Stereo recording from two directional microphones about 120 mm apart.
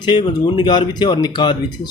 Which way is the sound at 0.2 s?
40° left (ahead or behind).